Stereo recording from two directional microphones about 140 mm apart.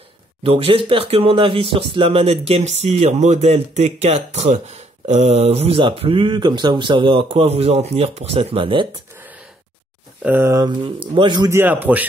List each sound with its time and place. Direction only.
0.4 s speech: 40° right (ahead or behind)
9.1 s a sound: 15° right (ahead or behind)
10.2 s a man's voice: 15° right (ahead or behind)
10.6 s speech: 35° right (ahead or behind)
11.5 s a man's voice: 15° right (ahead or behind)